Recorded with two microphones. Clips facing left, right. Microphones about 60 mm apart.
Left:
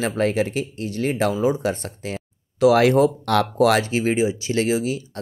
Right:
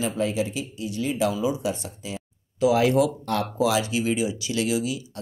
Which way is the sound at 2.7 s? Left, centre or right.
Left.